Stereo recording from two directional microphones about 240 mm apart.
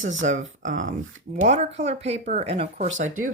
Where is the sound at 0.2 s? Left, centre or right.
Right.